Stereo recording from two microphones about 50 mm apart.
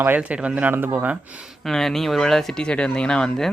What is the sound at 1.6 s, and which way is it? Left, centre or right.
Speech, centre.